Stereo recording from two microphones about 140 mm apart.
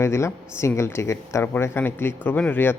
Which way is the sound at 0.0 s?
20° left (ahead or behind).